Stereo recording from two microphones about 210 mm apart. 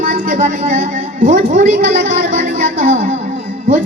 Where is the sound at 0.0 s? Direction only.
40° right (ahead or behind).